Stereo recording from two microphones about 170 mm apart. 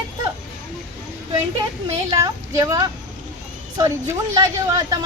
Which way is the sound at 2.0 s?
20° right (ahead or behind).